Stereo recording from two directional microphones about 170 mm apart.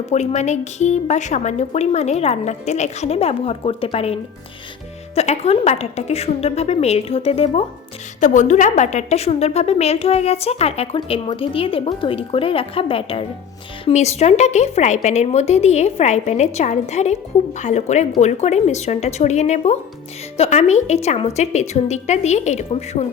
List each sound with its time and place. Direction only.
0.0 s a woman's voice: 40° left (ahead or behind)